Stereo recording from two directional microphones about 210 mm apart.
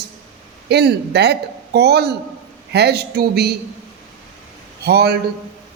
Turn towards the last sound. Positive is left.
turn(degrees=-50)  # may be behind; listen again after turning